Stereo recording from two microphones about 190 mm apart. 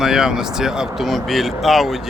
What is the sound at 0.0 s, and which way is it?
Speech, 5° right (ahead or behind).